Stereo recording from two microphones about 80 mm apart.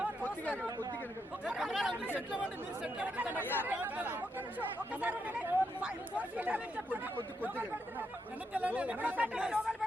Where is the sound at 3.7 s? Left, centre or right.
Centre.